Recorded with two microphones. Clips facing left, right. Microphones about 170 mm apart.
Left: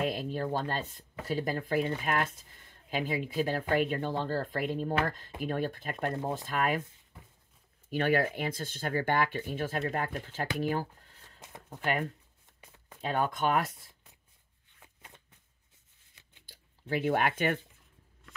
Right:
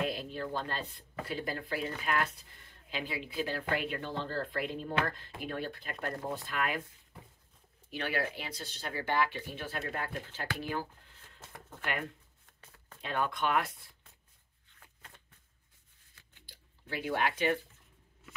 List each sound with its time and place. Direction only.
0.0 s speech: 45° left (ahead or behind)
7.9 s speech: 50° left (ahead or behind)
11.4 s shuffling cards: 15° left (ahead or behind)
11.8 s speech: 40° left (ahead or behind)
12.5 s a sound: 15° left (ahead or behind)
13.0 s speech: 40° left (ahead or behind)
14.8 s shuffling cards: 15° left (ahead or behind)
16.4 s speech: 45° left (ahead or behind)